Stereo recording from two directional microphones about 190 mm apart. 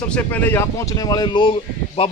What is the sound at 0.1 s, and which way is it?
Speech, 10° left (ahead or behind).